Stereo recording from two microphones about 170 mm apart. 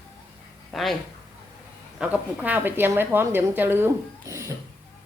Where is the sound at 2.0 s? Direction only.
10° right (ahead or behind).